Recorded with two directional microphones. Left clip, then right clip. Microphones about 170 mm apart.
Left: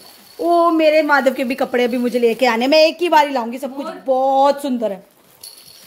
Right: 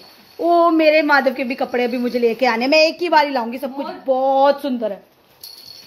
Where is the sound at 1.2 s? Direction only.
30° left (ahead or behind).